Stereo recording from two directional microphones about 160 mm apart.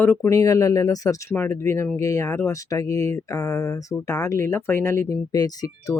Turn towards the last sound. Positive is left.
turn(degrees=20)  # may be behind; listen again after turning